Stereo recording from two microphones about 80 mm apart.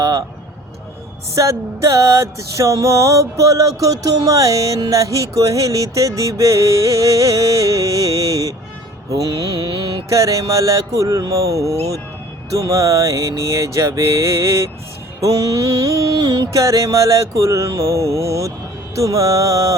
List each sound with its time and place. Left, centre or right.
0.0 s a sound: right
1.4 s music: right
12.5 s mantra: right
15.2 s music: right